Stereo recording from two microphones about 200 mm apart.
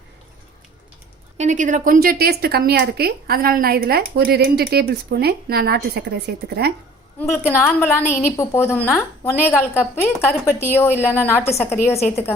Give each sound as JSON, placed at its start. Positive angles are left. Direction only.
{"t": 1.4, "sound": "a woman's voice", "side_deg": -40}
{"t": 7.2, "sound": "a woman's voice", "side_deg": 10}
{"t": 9.3, "sound": "a woman's voice", "side_deg": -5}
{"t": 9.6, "sound": "a woman's voice", "side_deg": 10}